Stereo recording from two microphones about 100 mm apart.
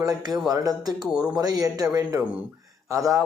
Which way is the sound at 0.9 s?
5° right (ahead or behind).